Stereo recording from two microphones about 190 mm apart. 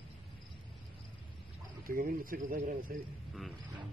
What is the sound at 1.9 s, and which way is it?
Speech, 50° right (ahead or behind).